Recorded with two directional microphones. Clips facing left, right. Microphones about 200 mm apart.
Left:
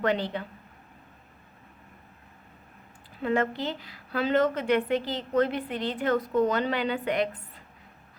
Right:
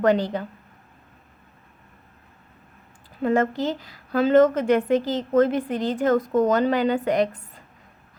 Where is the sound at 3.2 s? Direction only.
45° right (ahead or behind).